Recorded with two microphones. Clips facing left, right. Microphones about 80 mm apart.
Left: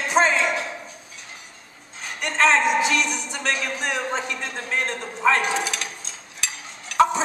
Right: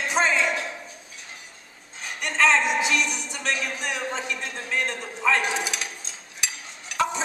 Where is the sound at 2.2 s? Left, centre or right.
Left.